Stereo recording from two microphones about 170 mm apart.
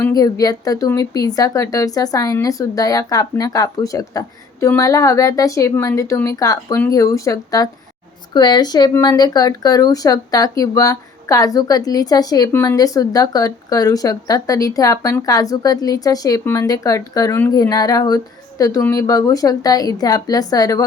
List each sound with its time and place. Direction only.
0.0 s speech: 20° left (ahead or behind)